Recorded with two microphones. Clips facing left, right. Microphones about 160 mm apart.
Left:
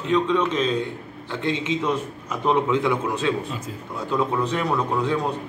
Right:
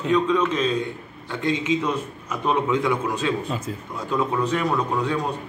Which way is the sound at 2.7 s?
10° right (ahead or behind).